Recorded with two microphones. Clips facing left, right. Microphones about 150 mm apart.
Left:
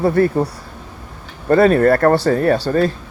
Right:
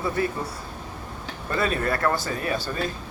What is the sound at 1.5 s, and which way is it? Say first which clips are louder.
Speech: left 14 dB; 55° left (ahead or behind).